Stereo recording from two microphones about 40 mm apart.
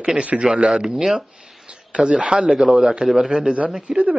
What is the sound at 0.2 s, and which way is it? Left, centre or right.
Speech, right.